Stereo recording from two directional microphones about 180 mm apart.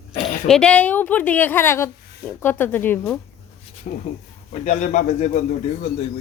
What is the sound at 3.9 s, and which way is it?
A man's voice, 45° left (ahead or behind).